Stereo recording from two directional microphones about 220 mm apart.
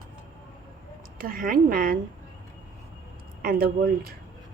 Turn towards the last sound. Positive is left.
turn(degrees=-40)  # may be behind; listen again after turning